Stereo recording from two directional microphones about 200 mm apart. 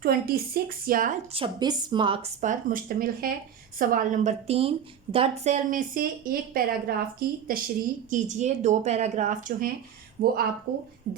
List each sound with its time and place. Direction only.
0.0 s speech: 50° right (ahead or behind)
1.3 s a woman's voice: 25° right (ahead or behind); by 11.2 s 55° right (ahead or behind)